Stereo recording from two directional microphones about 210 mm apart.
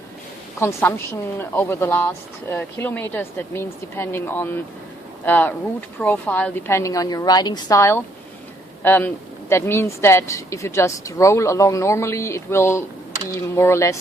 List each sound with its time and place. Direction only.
0.6 s speech: 10° left (ahead or behind)